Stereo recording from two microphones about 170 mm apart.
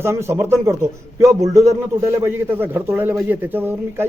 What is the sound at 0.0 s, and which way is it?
A man's voice, 15° right (ahead or behind).